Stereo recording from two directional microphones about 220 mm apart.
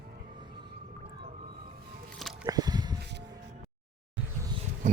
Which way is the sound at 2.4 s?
20° right (ahead or behind).